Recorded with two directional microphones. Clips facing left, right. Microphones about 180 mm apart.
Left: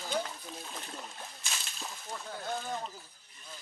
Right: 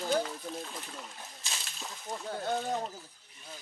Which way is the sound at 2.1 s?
40° right (ahead or behind).